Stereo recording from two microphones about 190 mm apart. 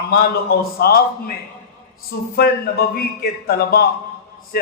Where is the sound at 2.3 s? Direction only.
55° left (ahead or behind).